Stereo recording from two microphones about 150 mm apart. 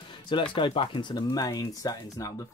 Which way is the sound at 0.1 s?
35° left (ahead or behind).